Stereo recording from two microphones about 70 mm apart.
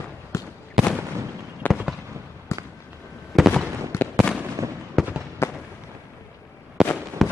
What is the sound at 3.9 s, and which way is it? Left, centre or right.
Fireworks, left.